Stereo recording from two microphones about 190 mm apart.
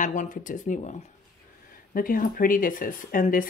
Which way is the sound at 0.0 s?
40° left (ahead or behind).